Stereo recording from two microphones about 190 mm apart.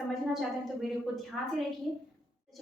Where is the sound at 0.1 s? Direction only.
Centre (ahead or behind).